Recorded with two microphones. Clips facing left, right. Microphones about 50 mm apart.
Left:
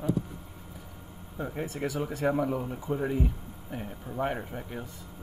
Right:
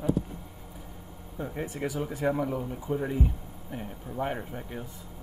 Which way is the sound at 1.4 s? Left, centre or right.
Centre.